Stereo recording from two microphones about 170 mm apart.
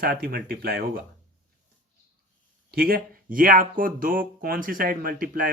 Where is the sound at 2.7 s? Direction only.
60° right (ahead or behind).